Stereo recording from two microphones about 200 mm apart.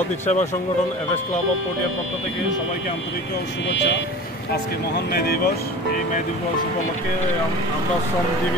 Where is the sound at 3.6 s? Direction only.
60° left (ahead or behind).